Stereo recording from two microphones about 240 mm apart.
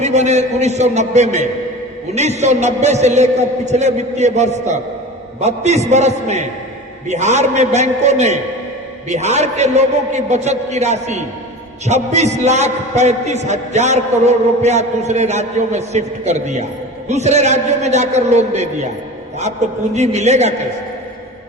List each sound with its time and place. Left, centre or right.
0.0 s a man's voice: right